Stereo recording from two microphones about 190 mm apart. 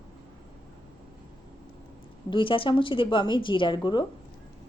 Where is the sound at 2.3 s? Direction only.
25° left (ahead or behind).